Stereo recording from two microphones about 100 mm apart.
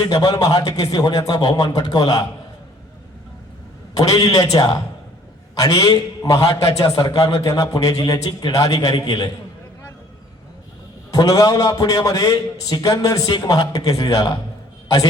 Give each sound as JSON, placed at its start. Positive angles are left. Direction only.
{"t": 0.0, "sound": "a man's voice", "side_deg": 40}
{"t": 3.9, "sound": "a man's voice", "side_deg": 35}
{"t": 6.5, "sound": "a man's voice", "side_deg": 65}
{"t": 6.9, "sound": "a man's voice", "side_deg": 45}
{"t": 7.2, "sound": "a man's voice", "side_deg": 30}
{"t": 8.5, "sound": "a man's voice", "side_deg": 35}
{"t": 11.1, "sound": "a man's voice", "side_deg": 40}